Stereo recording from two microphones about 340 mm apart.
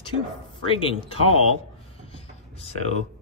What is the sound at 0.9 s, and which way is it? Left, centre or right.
Speech, centre.